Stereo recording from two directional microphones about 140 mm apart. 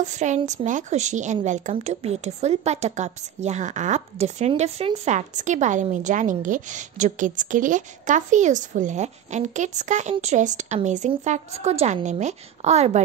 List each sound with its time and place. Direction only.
0.0 s a woman's voice: 60° right (ahead or behind)